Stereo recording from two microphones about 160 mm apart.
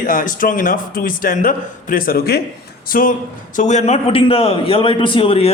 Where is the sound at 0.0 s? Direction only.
60° left (ahead or behind); by 2.4 s 75° left (ahead or behind).